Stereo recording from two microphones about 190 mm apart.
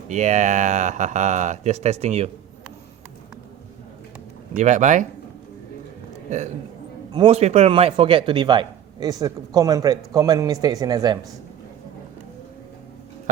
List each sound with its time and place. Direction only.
0.1 s speech: 40° right (ahead or behind)
4.5 s speech: 40° right (ahead or behind)
7.1 s speech: 25° right (ahead or behind)